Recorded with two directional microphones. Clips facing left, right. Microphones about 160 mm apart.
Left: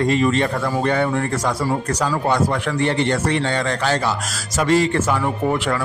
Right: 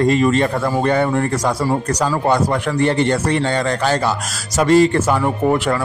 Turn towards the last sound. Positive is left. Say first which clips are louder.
# right 4 dB
turn(degrees=-40)  # may be behind; listen again after turning